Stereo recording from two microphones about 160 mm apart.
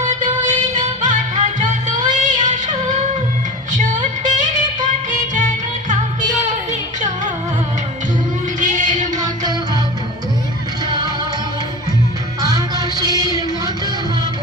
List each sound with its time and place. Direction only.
0.0 s music: 50° right (ahead or behind)
8.6 s music: 50° right (ahead or behind)
10.8 s music: 25° right (ahead or behind)
12.4 s music: 20° right (ahead or behind)